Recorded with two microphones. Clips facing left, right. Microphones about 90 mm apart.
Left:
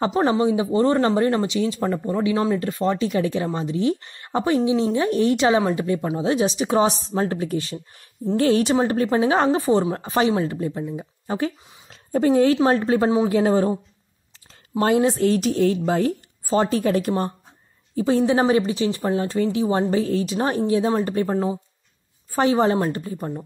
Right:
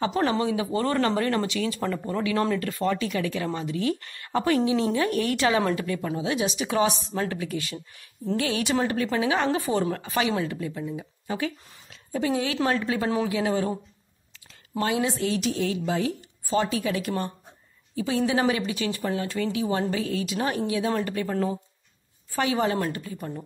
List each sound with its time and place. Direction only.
0.1 s speech: 25° left (ahead or behind)
6.1 s a woman's voice: 35° left (ahead or behind)
14.8 s speech: 40° left (ahead or behind)